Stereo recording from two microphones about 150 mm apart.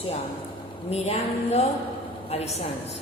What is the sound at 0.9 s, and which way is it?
A woman's voice, 45° left (ahead or behind).